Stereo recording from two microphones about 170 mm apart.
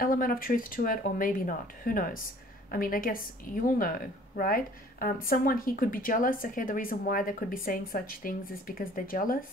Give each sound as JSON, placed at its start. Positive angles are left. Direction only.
{"t": 0.0, "sound": "a woman's voice", "side_deg": 55}